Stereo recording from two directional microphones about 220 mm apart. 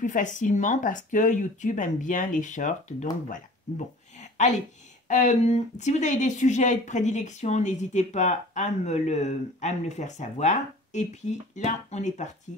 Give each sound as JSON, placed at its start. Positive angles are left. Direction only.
{"t": 0.0, "sound": "speech", "side_deg": 35}